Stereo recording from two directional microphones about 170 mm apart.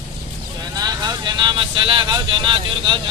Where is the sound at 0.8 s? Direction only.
25° right (ahead or behind).